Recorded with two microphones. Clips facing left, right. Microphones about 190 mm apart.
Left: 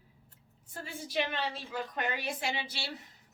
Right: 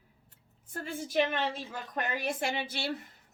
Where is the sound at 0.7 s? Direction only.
50° right (ahead or behind).